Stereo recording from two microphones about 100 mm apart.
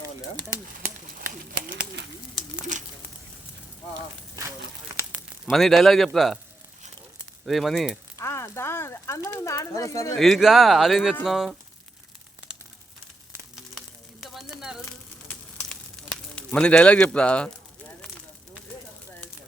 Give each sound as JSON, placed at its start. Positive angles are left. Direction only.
{"t": 0.0, "sound": "bird", "side_deg": -25}
{"t": 5.5, "sound": "speech", "side_deg": 0}
{"t": 7.4, "sound": "speech", "side_deg": 0}
{"t": 8.2, "sound": "a sound", "side_deg": 25}
{"t": 10.2, "sound": "speech", "side_deg": 0}
{"t": 13.6, "sound": "sizzle", "side_deg": 0}
{"t": 14.6, "sound": "a sound", "side_deg": -5}
{"t": 15.3, "sound": "a sound", "side_deg": 10}
{"t": 16.3, "sound": "speech", "side_deg": 10}